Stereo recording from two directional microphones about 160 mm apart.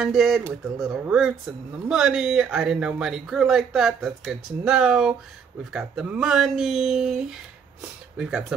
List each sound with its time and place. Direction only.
0.0 s speech: 5° right (ahead or behind)